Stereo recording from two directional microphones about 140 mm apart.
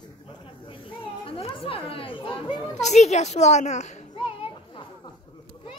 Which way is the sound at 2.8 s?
55° left (ahead or behind).